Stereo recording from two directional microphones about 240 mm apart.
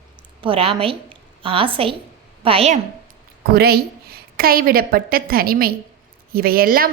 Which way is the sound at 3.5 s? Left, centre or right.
Right.